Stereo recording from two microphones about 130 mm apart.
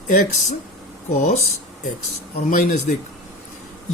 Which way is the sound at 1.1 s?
70° left (ahead or behind).